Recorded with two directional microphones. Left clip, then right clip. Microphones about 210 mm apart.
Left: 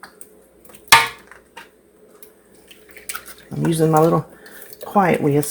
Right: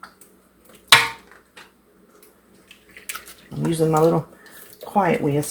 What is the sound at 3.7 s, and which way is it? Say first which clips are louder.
Speech: left 2 dB; 35° left (ahead or behind).